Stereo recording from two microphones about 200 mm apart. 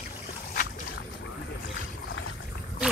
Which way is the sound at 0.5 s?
45° left (ahead or behind).